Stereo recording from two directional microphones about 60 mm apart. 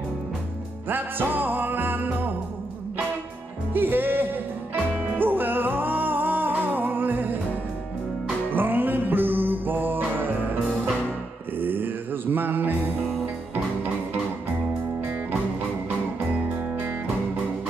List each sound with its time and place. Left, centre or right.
0.8 s music: right
3.7 s music: right
8.5 s music: right
16.4 s music: right